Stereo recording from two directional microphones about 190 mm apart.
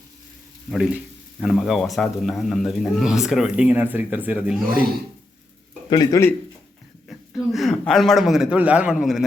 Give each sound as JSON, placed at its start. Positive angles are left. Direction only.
{"t": 0.7, "sound": "speech", "side_deg": -5}
{"t": 5.9, "sound": "speech", "side_deg": 20}
{"t": 7.1, "sound": "a man's voice", "side_deg": 0}